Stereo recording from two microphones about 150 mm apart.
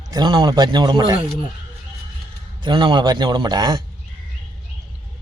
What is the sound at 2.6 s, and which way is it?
A man's voice, 30° right (ahead or behind).